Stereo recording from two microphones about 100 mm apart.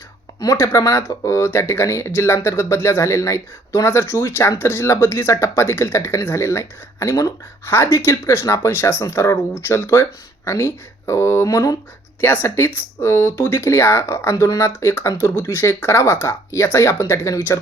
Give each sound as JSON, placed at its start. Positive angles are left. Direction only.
{"t": 0.5, "sound": "speech", "side_deg": 25}
{"t": 12.2, "sound": "speech", "side_deg": 25}